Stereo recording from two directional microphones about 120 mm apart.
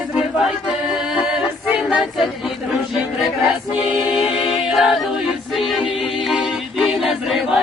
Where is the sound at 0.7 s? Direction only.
5° right (ahead or behind).